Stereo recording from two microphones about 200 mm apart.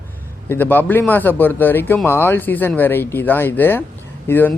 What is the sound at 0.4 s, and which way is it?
Speech, 10° left (ahead or behind).